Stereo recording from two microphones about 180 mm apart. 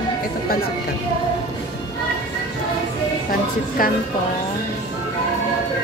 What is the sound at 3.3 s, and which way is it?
Speech, 50° left (ahead or behind).